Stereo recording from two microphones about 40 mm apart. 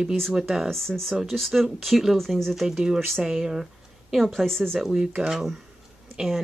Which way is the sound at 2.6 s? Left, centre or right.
Centre.